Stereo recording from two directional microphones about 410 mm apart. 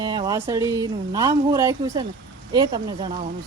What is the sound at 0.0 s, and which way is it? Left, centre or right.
Speech, centre.